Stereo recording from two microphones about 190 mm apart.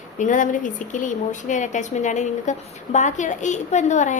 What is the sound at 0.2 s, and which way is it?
A woman's voice, 40° left (ahead or behind).